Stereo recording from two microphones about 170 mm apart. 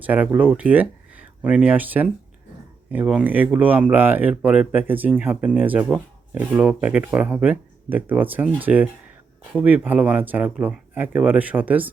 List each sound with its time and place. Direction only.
0.0 s speech: 10° right (ahead or behind)